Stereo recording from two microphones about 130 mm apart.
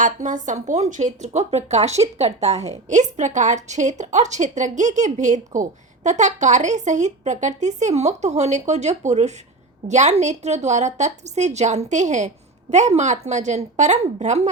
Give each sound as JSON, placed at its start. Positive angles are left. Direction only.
{"t": 0.0, "sound": "a woman's voice", "side_deg": -80}